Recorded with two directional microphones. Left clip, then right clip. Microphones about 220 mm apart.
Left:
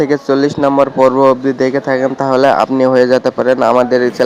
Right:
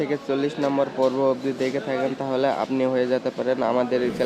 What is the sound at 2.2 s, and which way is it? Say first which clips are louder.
A man's voice: left 15 dB; 30° left (ahead or behind).